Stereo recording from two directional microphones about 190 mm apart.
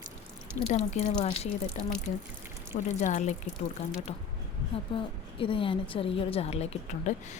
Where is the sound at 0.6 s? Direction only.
35° left (ahead or behind).